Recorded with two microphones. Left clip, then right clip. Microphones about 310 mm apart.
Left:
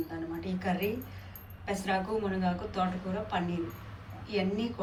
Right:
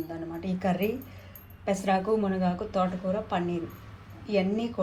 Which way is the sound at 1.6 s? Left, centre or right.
Centre.